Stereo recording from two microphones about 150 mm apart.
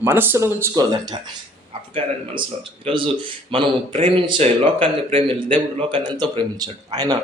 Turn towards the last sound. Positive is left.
turn(degrees=-25)  # may be behind; listen again after turning